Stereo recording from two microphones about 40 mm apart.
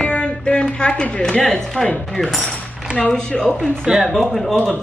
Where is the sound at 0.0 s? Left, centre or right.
Left.